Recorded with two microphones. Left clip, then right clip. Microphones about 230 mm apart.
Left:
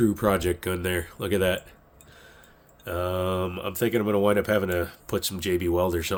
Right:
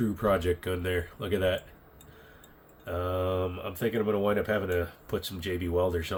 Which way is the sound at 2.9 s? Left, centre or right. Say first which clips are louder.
Left 3 dB; left.